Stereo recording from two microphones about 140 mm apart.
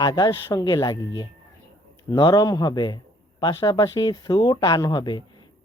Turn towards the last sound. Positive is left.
turn(degrees=30)  # may be behind; listen again after turning